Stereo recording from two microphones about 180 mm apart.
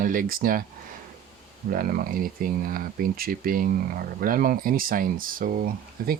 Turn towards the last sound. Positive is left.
turn(degrees=-50)  # may be behind; listen again after turning